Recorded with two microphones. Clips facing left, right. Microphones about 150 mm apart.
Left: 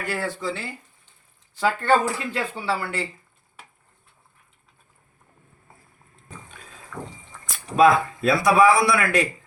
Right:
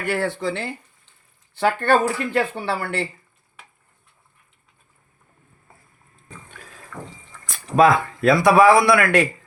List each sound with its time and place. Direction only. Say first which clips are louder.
0.0 s speech: right 4 dB; 65° right (ahead or behind)
8.2 s speech: right 4 dB; 65° right (ahead or behind)